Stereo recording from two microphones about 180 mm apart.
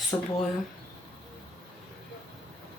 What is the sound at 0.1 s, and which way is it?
Speech, 20° left (ahead or behind).